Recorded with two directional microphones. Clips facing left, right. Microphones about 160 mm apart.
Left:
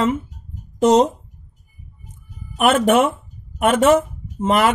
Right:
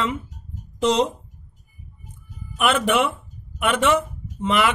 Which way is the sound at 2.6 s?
45° left (ahead or behind).